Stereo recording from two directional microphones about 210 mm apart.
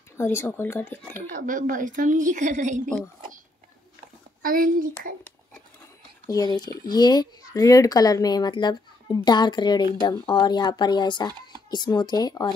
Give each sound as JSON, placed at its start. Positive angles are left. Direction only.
{"t": 0.2, "sound": "speech", "side_deg": 10}
{"t": 1.1, "sound": "a woman's voice", "side_deg": -40}
{"t": 4.4, "sound": "a woman's voice", "side_deg": -40}
{"t": 6.2, "sound": "speech", "side_deg": 15}